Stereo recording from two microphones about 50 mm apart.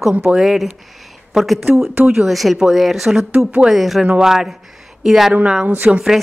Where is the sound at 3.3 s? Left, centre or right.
Right.